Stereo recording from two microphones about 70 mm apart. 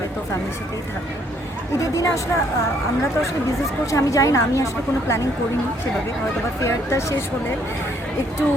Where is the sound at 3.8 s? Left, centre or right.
Left.